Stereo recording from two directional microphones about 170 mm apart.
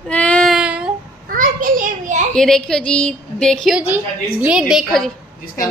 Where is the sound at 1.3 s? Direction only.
55° right (ahead or behind).